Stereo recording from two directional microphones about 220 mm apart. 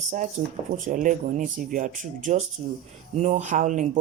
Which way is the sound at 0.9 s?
35° right (ahead or behind).